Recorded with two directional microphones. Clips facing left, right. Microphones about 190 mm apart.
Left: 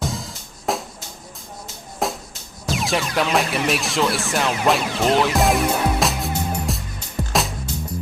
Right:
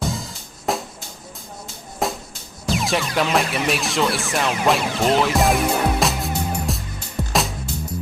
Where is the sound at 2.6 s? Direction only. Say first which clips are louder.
Right 1 dB; centre (ahead or behind).